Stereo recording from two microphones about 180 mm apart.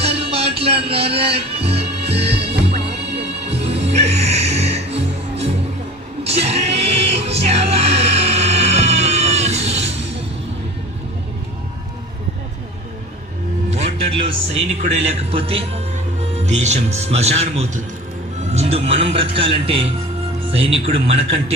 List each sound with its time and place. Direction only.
0.0 s music: 35° right (ahead or behind)
13.7 s a man's voice: 35° right (ahead or behind)